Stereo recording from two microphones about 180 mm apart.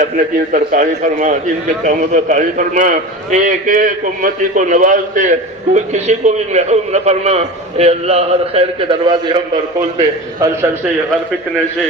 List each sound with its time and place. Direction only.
0.0 s a man's voice: 45° right (ahead or behind); by 10.7 s 20° right (ahead or behind)